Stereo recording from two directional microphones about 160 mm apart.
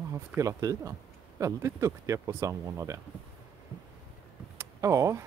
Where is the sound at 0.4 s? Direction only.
20° right (ahead or behind).